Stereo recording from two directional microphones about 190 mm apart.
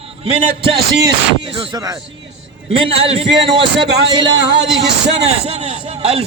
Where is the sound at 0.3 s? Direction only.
25° right (ahead or behind).